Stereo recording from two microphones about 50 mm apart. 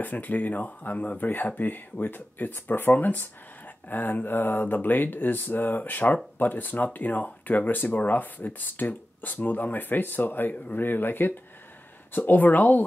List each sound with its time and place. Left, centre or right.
0.0 s speech: left